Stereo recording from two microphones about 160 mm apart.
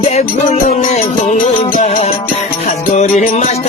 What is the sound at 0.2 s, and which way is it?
Music, 50° left (ahead or behind).